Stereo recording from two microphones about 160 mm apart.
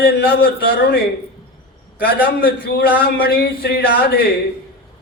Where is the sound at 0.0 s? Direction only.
70° left (ahead or behind).